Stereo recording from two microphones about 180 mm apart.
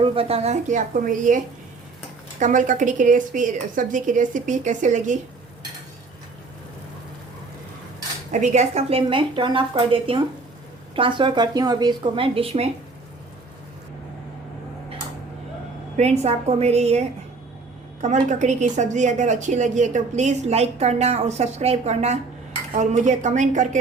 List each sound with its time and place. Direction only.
0.0 s a woman's voice: 30° right (ahead or behind); by 1.4 s 45° right (ahead or behind)
2.4 s a woman's voice: 45° right (ahead or behind)
8.3 s speech: 40° right (ahead or behind)
16.0 s a woman's voice: 35° right (ahead or behind)